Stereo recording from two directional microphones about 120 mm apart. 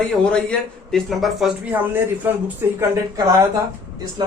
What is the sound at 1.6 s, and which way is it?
Speech, 15° right (ahead or behind).